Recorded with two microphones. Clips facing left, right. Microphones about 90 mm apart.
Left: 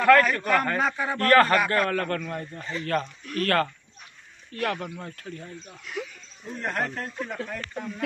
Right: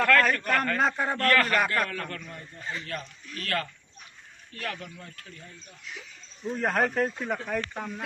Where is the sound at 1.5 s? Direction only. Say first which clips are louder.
Left 4 dB; 45° left (ahead or behind).